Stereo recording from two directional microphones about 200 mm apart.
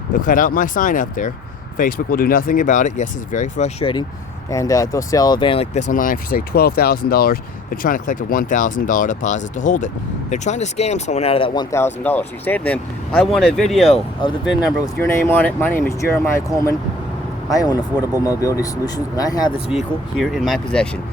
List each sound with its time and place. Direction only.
0.1 s speech: 40° left (ahead or behind)
4.5 s speech: 15° left (ahead or behind)
5.9 s speech: 45° left (ahead or behind); by 13.8 s centre (ahead or behind)
13.8 s speech: 30° left (ahead or behind)
15.0 s speech: 10° left (ahead or behind)
19.7 s speech: centre (ahead or behind)